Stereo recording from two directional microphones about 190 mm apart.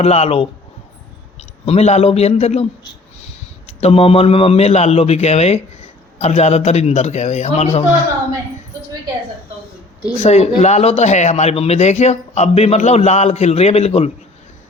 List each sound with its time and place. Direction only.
0.0 s a man's voice: 35° left (ahead or behind)
3.7 s a man's voice: 35° left (ahead or behind)
10.2 s a man's voice: 35° left (ahead or behind)